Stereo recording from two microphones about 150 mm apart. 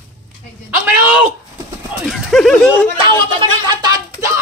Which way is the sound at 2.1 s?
Centre (ahead or behind).